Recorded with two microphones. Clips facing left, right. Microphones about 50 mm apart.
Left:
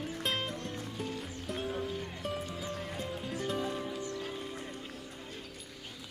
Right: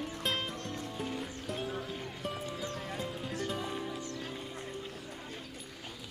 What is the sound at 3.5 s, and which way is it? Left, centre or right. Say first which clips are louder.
Music: left 5 dB; centre.